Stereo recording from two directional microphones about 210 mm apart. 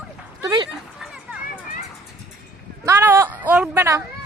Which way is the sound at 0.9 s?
Centre (ahead or behind).